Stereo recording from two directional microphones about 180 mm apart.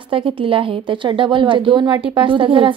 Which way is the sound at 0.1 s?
30° right (ahead or behind).